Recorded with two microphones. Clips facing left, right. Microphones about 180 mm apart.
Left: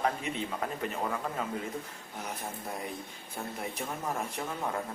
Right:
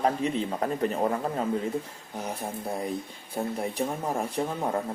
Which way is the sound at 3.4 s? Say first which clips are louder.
Right 8 dB; 40° right (ahead or behind).